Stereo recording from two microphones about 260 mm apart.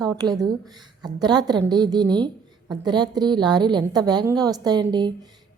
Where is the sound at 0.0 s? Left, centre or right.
Centre.